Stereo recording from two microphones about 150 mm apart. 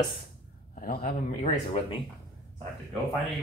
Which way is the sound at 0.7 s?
75° left (ahead or behind).